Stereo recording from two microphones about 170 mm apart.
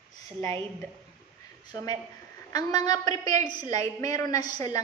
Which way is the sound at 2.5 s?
20° left (ahead or behind).